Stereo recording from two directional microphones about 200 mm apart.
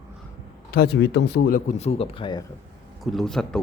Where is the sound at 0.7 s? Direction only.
50° left (ahead or behind).